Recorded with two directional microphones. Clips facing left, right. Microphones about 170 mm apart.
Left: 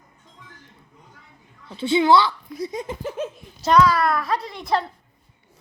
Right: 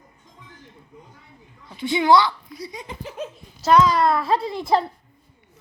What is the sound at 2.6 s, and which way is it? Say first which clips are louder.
Speech: left 6 dB; 45° left (ahead or behind).